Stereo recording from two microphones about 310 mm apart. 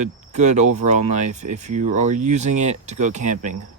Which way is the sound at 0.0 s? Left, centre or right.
Right.